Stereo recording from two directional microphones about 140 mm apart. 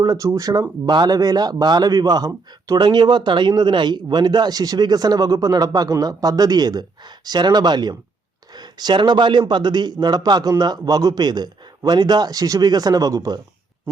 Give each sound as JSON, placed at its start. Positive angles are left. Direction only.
{"t": 0.0, "sound": "a man's voice", "side_deg": -25}